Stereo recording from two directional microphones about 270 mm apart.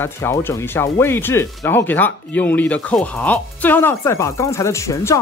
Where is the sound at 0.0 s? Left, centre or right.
Centre.